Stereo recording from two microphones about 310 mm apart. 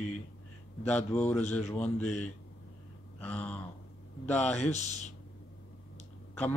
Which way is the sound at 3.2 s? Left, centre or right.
Centre.